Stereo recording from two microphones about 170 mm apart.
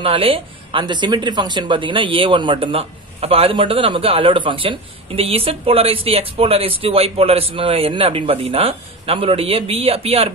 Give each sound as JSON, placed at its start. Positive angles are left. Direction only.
{"t": 0.0, "sound": "speech", "side_deg": -35}